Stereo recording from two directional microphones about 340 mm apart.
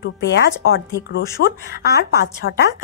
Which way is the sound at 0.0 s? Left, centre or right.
Left.